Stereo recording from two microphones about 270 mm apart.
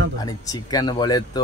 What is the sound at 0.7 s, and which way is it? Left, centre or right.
Speech, centre.